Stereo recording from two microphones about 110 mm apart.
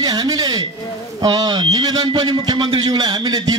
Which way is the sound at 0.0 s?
35° right (ahead or behind).